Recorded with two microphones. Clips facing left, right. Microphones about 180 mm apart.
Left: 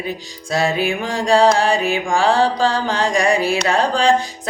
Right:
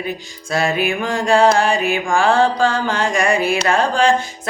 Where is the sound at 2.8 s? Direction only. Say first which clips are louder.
Even; 35° left (ahead or behind).